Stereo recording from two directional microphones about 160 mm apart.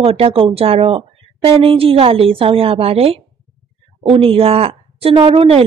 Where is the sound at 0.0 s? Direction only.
35° right (ahead or behind).